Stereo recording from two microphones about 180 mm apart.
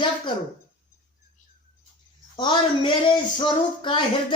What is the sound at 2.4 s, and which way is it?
A child's voice, 25° left (ahead or behind).